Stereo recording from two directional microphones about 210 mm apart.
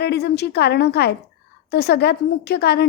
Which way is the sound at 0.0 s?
50° left (ahead or behind).